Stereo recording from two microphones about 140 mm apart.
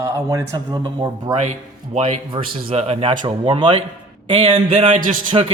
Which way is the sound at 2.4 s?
45° right (ahead or behind).